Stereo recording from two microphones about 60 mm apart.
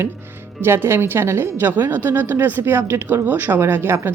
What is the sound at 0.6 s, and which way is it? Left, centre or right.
Speech, right.